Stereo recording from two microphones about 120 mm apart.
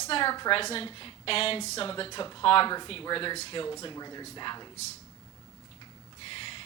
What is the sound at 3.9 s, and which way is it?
Speech, 35° left (ahead or behind).